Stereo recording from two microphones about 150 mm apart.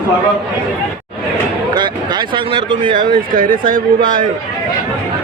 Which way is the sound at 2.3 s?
35° right (ahead or behind).